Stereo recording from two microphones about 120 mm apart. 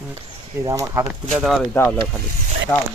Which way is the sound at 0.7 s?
25° right (ahead or behind).